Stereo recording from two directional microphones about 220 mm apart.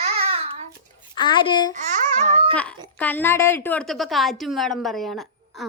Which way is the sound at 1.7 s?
30° right (ahead or behind).